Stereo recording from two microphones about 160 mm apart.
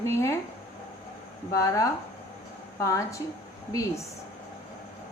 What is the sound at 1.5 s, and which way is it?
A woman's voice, 20° left (ahead or behind).